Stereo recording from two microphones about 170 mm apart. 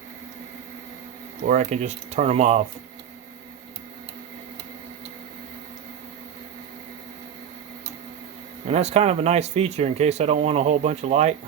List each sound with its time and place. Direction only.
1.4 s speech: 45° right (ahead or behind)
8.6 s speech: 40° right (ahead or behind)